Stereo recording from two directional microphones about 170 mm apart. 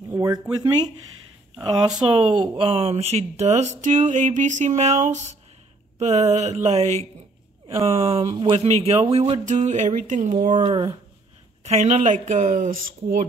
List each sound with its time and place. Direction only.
0.1 s speech: 20° right (ahead or behind)
2.0 s speech: 30° right (ahead or behind)
9.5 s speech: 45° right (ahead or behind)
10.6 s speech: 25° right (ahead or behind)
11.6 s speech: 40° right (ahead or behind)